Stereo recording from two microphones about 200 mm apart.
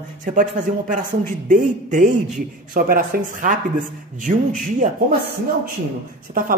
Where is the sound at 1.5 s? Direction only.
40° right (ahead or behind).